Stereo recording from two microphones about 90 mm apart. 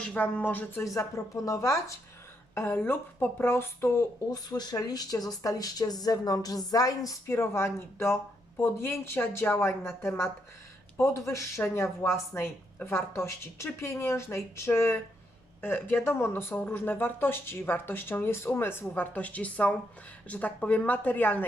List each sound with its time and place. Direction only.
0.0 s speech: 15° left (ahead or behind)
0.9 s speech: 35° left (ahead or behind)
4.3 s speech: 50° left (ahead or behind); by 21.3 s 20° left (ahead or behind)